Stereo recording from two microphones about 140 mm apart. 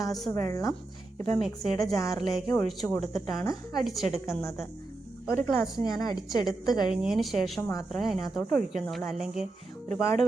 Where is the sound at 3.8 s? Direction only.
Centre (ahead or behind).